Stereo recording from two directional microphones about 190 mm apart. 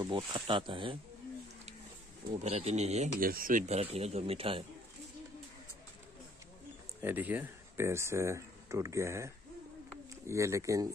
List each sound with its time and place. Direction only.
0.0 s speech: 25° right (ahead or behind)
2.3 s speech: 35° right (ahead or behind)
7.0 s speech: 10° right (ahead or behind)